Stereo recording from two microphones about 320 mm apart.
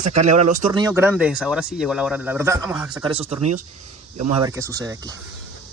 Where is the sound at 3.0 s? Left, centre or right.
Centre.